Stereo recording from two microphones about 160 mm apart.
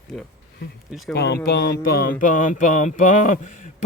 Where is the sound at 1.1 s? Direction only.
90° left.